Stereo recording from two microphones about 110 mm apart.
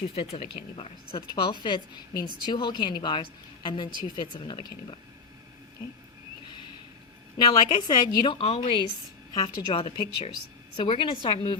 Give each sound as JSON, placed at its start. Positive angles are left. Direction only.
{"t": 0.2, "sound": "speech", "side_deg": 60}
{"t": 1.3, "sound": "speech", "side_deg": 50}
{"t": 7.3, "sound": "a woman's voice", "side_deg": 40}
{"t": 9.3, "sound": "speech", "side_deg": 40}